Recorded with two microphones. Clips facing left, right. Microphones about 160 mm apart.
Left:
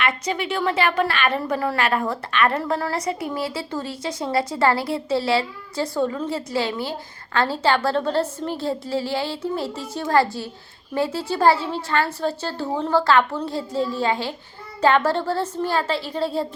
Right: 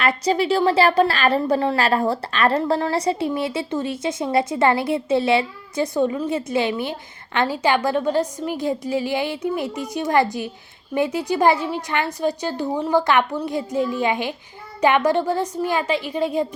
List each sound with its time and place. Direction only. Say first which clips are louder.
0.0 s a woman's voice: right 5 dB; 35° right (ahead or behind); by 16.5 s 15° right (ahead or behind)